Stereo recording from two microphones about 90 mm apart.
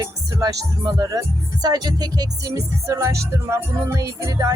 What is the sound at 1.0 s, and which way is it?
Speech, 40° right (ahead or behind).